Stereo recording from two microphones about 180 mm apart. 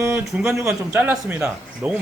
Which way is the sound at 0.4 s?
15° right (ahead or behind).